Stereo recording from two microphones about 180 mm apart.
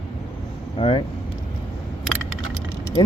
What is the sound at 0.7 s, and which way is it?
Speech, 35° left (ahead or behind).